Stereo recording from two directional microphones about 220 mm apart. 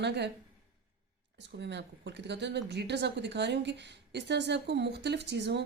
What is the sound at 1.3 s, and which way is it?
A woman's voice, 50° right (ahead or behind).